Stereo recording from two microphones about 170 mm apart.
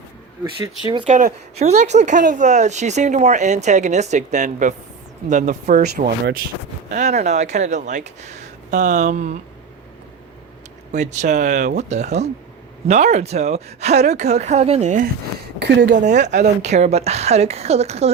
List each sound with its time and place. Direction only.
0.4 s speech: 30° right (ahead or behind)
1.0 s speech: 45° right (ahead or behind)
5.8 s speech: 65° right (ahead or behind)
6.9 s speech: 45° right (ahead or behind)
10.9 s speech: 45° right (ahead or behind)
15.5 s speech: 90° right
16.0 s speech: 45° right (ahead or behind)